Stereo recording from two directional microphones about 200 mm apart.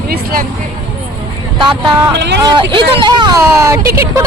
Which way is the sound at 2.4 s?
25° right (ahead or behind).